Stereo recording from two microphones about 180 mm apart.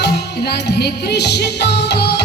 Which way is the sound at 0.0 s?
65° left (ahead or behind).